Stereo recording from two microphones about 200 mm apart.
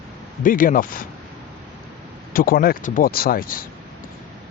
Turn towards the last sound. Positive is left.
turn(degrees=45)  # may be behind; listen again after turning